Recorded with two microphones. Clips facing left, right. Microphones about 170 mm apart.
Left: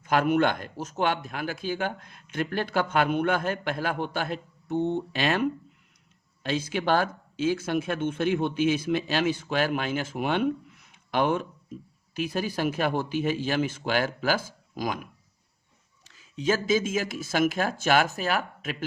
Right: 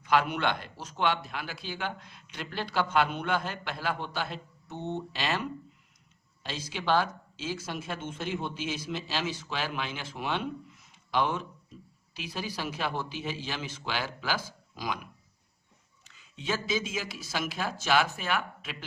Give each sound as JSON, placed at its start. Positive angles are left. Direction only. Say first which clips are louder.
{"t": 0.0, "sound": "a man's voice", "louder": "left 4 dB", "side_deg": 45}
{"t": 16.3, "sound": "a man's voice", "louder": "left 7 dB", "side_deg": 40}